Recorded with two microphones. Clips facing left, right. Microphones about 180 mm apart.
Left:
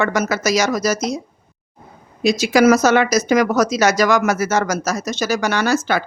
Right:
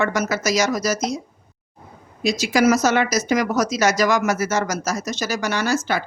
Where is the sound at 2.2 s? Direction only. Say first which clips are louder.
Left 4 dB; 65° left (ahead or behind).